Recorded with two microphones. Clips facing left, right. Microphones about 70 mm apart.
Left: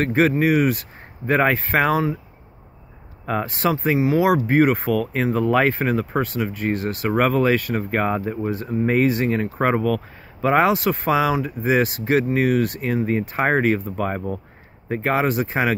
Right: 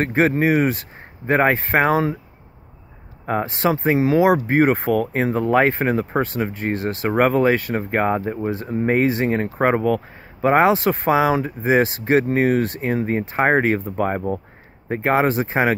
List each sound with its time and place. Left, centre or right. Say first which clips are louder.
0.0 s speech: even; right
3.3 s speech: right 2 dB; right